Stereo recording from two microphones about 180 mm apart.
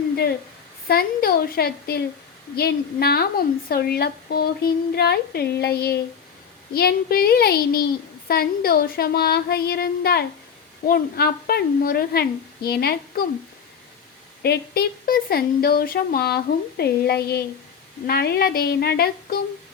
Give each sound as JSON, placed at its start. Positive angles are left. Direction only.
{"t": 0.9, "sound": "a woman's voice", "side_deg": 55}
{"t": 14.4, "sound": "a woman's voice", "side_deg": 60}